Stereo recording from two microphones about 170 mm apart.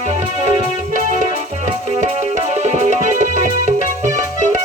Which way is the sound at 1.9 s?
45° right (ahead or behind).